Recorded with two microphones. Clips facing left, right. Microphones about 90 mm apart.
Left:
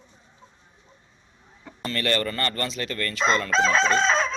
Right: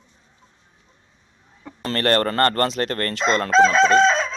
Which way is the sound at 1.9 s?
55° right (ahead or behind).